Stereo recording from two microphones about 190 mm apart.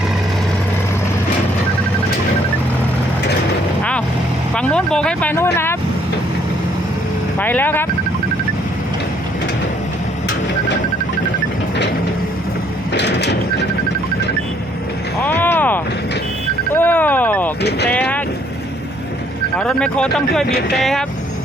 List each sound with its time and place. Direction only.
4.5 s speech: 5° left (ahead or behind)
7.3 s speech: 10° left (ahead or behind)
12.9 s sliding door: 65° left (ahead or behind)
15.2 s a sound: 10° left (ahead or behind)
17.6 s vehicle: 60° left (ahead or behind)
17.8 s vehicle: 10° left (ahead or behind)
19.5 s speech: 5° left (ahead or behind)